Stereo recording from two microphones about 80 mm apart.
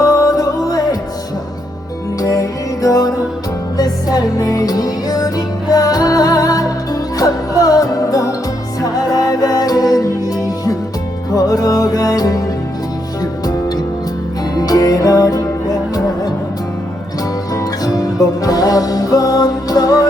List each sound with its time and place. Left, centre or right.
0.0 s music: left
2.2 s music: left
14.5 s music: left
17.5 s music: left